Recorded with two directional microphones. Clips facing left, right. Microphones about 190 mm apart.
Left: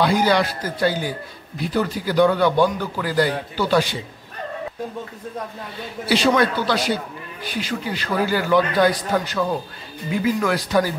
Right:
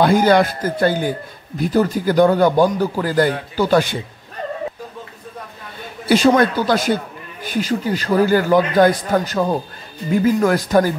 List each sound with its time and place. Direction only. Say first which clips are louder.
0.0 s a man's voice: right 5 dB; 50° right (ahead or behind)
6.0 s a man's voice: right 5 dB; 45° right (ahead or behind)